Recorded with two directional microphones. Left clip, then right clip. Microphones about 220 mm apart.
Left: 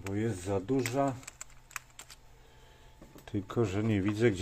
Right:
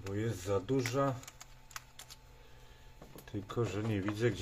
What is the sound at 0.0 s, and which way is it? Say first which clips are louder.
Speech: left 4 dB; 30° left (ahead or behind).